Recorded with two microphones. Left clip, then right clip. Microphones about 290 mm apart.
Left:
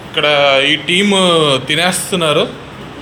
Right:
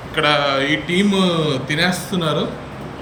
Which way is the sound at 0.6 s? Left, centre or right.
Left.